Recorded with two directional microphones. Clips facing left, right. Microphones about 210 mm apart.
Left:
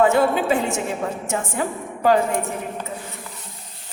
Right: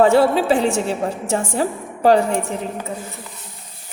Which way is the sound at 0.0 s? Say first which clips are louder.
Right 3 dB; 35° right (ahead or behind).